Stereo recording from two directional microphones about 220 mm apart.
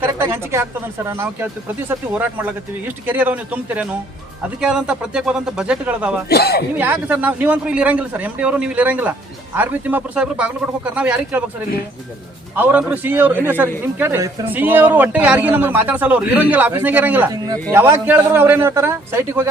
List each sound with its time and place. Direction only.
0.0 s a man's voice: 10° right (ahead or behind)
6.2 s a man's voice: 45° left (ahead or behind)
6.7 s a man's voice: 10° right (ahead or behind)
12.5 s a man's voice: 10° right (ahead or behind)